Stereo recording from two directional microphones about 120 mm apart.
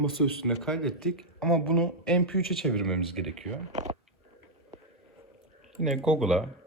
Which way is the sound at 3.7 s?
70° right (ahead or behind).